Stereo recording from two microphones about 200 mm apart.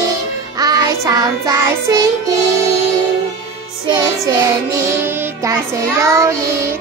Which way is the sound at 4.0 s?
15° right (ahead or behind).